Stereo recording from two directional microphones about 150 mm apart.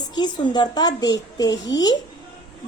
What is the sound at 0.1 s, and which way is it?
A woman's voice, 30° left (ahead or behind).